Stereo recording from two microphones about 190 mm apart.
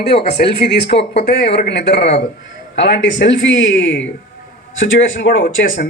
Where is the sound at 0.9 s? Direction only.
60° left (ahead or behind).